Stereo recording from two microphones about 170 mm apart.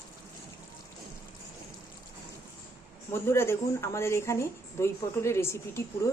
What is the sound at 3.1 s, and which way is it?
Speech, 15° left (ahead or behind).